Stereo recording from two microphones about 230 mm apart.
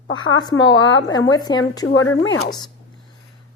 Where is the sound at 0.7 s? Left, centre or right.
Left.